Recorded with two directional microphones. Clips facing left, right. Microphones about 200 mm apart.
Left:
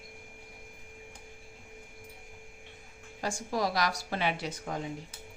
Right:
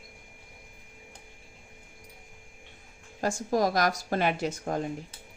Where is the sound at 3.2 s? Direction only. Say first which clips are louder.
Right 5 dB; 45° right (ahead or behind).